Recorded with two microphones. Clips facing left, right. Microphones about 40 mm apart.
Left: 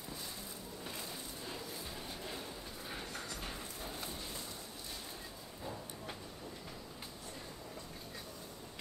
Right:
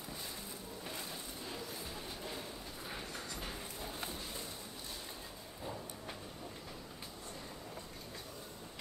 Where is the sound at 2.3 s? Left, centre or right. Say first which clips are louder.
Even; centre.